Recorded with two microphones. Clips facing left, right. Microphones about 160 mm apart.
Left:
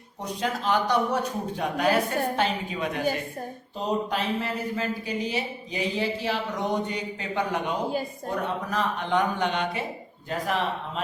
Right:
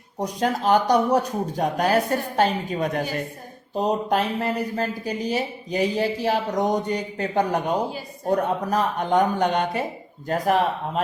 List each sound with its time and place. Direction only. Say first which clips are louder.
0.2 s speech: right 6 dB; 45° right (ahead or behind)
4.1 s speech: right 5 dB; 40° right (ahead or behind)